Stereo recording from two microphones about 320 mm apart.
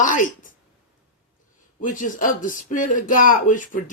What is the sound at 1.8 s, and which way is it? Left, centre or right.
Speech, left.